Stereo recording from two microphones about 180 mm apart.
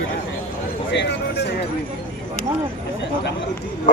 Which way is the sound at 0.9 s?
70° left (ahead or behind).